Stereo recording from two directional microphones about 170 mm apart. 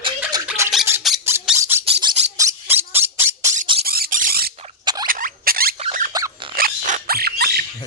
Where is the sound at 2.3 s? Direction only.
15° right (ahead or behind).